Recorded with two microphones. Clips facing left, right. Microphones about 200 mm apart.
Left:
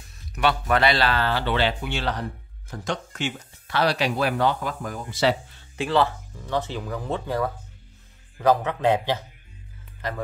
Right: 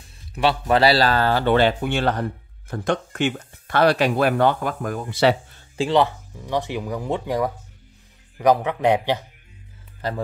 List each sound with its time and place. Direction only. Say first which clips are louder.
0.3 s speech: right 3 dB; 30° right (ahead or behind); by 5.6 s 60° right (ahead or behind)
5.8 s speech: right 3 dB; 20° right (ahead or behind)